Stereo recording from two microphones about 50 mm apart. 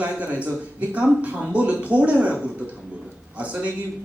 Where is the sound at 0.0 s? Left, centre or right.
Right.